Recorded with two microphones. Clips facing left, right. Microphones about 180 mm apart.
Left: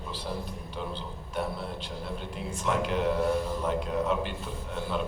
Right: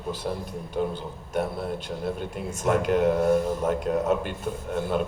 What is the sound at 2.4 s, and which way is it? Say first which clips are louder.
Speech: right 6 dB; 50° right (ahead or behind).